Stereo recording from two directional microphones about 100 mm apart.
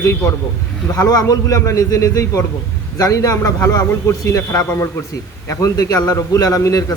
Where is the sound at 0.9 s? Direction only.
35° left (ahead or behind).